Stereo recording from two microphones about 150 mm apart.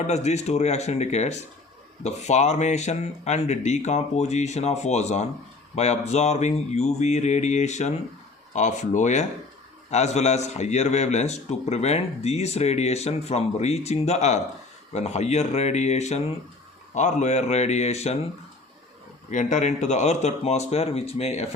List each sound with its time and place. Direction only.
0.1 s a man's voice: 50° left (ahead or behind)
19.3 s a man's voice: 55° left (ahead or behind)